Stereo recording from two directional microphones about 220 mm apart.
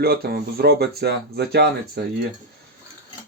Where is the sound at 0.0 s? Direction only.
45° right (ahead or behind).